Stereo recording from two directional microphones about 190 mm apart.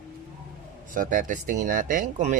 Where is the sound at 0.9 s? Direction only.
45° right (ahead or behind).